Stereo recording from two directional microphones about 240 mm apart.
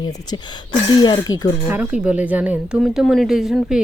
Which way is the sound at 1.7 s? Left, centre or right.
Centre.